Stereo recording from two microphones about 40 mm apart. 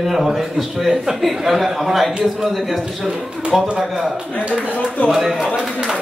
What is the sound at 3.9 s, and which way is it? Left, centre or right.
A man's voice, centre.